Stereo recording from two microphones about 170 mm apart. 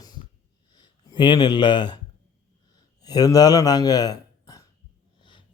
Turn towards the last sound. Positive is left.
turn(degrees=30)  # may be behind; listen again after turning